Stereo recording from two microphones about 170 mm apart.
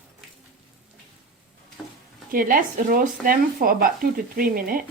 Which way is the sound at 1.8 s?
5° left (ahead or behind).